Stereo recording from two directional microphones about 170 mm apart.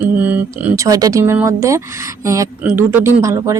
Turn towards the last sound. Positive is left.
turn(degrees=-20)  # may be behind; listen again after turning